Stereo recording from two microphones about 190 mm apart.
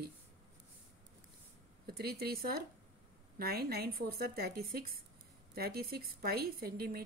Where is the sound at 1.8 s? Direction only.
55° right (ahead or behind).